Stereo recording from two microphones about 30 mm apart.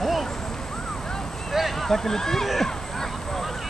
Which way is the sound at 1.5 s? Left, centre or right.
Centre.